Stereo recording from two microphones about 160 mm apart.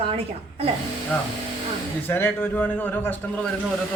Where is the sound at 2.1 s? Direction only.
15° left (ahead or behind).